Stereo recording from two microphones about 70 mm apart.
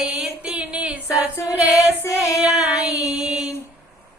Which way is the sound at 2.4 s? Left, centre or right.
Centre.